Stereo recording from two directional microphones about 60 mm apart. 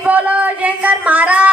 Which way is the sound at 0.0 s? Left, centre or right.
Right.